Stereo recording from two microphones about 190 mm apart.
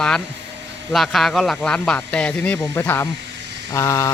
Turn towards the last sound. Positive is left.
turn(degrees=15)  # may be behind; listen again after turning